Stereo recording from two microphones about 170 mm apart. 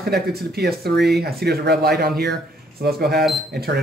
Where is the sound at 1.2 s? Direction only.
70° right (ahead or behind).